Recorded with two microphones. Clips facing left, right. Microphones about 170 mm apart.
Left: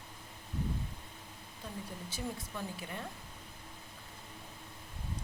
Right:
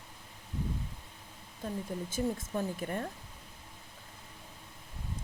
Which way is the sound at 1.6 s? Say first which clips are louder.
Right 8 dB; 50° right (ahead or behind).